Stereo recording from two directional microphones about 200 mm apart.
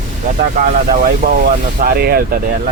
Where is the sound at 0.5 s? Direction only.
45° right (ahead or behind).